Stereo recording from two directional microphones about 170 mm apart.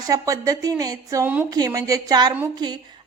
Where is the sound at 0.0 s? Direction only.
20° right (ahead or behind).